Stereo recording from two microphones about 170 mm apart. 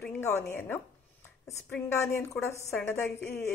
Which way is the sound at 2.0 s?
15° left (ahead or behind).